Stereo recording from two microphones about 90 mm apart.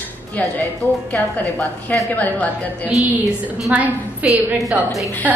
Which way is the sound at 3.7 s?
20° right (ahead or behind).